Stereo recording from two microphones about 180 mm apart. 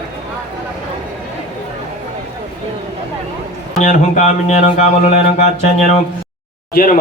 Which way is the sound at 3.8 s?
40° left (ahead or behind).